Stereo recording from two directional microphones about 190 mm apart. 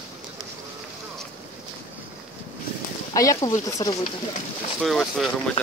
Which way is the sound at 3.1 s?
15° left (ahead or behind).